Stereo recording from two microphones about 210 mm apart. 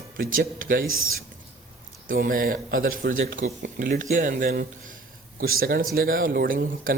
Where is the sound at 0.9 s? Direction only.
75° right (ahead or behind).